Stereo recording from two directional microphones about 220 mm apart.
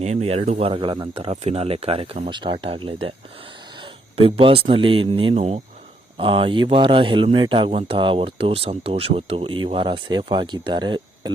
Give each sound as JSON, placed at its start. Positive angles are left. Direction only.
{"t": 0.0, "sound": "speech", "side_deg": -30}
{"t": 4.2, "sound": "speech", "side_deg": -25}